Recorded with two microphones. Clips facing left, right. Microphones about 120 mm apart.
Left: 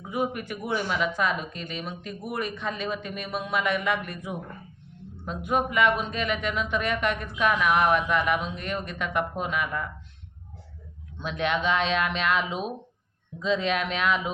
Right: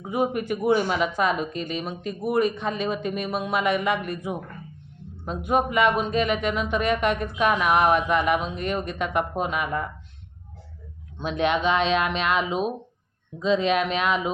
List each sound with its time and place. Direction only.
0.1 s speech: 20° right (ahead or behind)
11.2 s speech: 20° right (ahead or behind)
13.4 s speech: 15° right (ahead or behind)